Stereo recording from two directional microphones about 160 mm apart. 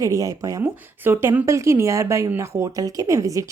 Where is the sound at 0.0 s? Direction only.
20° right (ahead or behind).